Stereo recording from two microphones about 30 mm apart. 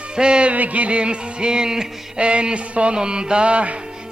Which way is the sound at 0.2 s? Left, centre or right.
Right.